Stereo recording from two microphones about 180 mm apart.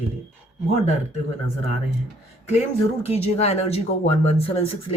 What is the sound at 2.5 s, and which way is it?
A woman's voice, 35° left (ahead or behind).